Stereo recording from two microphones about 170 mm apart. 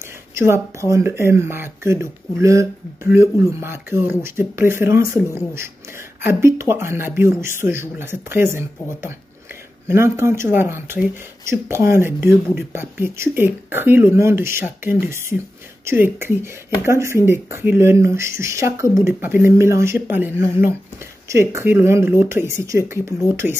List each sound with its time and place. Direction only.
0.3 s speech: 15° right (ahead or behind)